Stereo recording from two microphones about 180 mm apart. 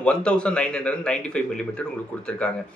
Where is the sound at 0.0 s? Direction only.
5° left (ahead or behind).